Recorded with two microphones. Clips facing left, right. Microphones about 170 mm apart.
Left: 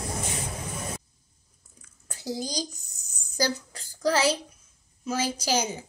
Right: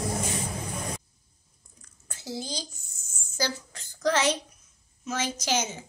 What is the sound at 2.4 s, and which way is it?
Speech, 40° left (ahead or behind).